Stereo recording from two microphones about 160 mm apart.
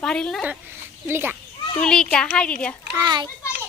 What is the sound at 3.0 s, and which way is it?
Speech, 25° right (ahead or behind).